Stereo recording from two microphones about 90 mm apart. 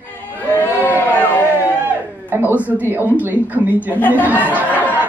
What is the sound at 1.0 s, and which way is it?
Speech, 20° left (ahead or behind).